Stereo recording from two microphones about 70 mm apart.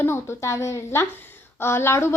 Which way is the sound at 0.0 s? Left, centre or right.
Left.